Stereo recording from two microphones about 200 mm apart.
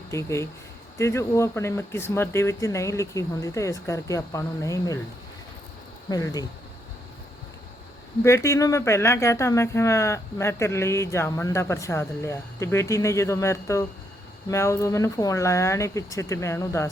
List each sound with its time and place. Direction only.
0.1 s speech: 15° left (ahead or behind)
6.1 s speech: 20° left (ahead or behind)
8.2 s speech: 15° left (ahead or behind)